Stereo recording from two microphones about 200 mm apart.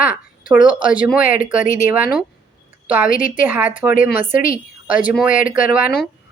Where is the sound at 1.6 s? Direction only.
40° left (ahead or behind).